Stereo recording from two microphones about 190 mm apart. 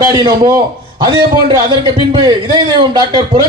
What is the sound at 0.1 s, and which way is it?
A man's voice, 20° right (ahead or behind).